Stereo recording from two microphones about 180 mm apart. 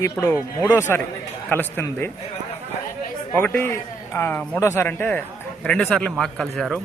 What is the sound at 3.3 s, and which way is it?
Speech, 10° left (ahead or behind).